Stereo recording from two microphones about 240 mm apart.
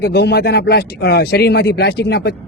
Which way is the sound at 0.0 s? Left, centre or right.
Left.